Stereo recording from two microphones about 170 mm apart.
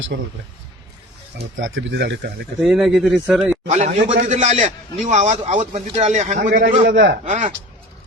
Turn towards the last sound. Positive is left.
turn(degrees=-50)  # may be behind; listen again after turning